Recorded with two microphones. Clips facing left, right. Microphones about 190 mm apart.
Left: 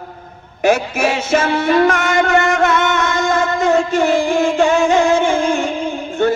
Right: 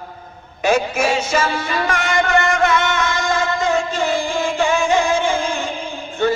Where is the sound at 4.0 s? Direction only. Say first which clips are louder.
Left 6 dB; 65° left (ahead or behind).